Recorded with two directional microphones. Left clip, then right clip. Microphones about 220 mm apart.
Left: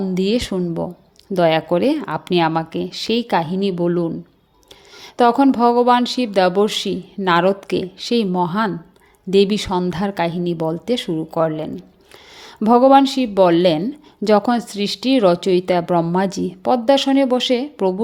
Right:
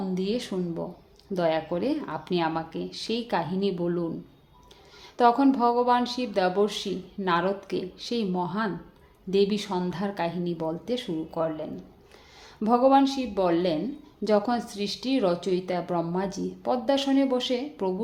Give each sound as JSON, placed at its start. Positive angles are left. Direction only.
{"t": 0.1, "sound": "speech", "side_deg": 35}